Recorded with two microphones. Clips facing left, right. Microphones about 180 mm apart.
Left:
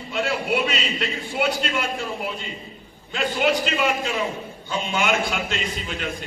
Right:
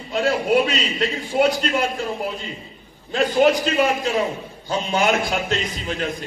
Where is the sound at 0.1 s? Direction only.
40° right (ahead or behind).